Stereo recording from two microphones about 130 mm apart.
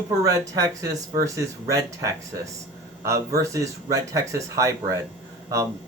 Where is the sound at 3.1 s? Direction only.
25° right (ahead or behind).